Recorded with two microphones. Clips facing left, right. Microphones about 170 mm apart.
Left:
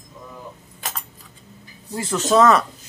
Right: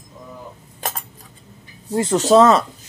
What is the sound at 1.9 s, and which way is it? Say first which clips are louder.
Speech: right 4 dB; 35° right (ahead or behind).